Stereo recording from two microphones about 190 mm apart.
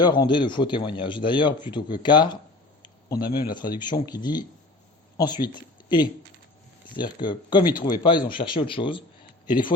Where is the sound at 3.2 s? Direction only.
55° left (ahead or behind).